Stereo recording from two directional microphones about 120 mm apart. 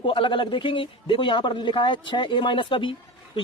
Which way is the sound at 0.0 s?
45° left (ahead or behind).